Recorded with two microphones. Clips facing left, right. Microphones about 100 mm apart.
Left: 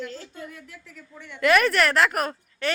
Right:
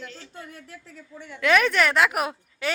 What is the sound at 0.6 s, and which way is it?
Speech, 35° right (ahead or behind).